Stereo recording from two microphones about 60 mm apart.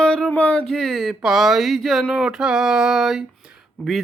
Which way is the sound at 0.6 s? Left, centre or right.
Centre.